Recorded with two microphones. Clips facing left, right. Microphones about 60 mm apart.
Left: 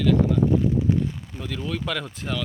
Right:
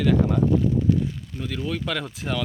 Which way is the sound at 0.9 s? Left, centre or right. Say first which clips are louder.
Right 3 dB; left.